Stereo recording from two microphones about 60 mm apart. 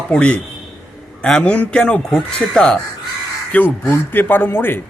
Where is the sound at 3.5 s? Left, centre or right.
Left.